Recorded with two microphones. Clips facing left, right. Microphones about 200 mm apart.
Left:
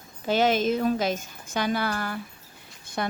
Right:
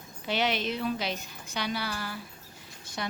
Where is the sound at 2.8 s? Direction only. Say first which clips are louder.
Left 6 dB; 55° left (ahead or behind).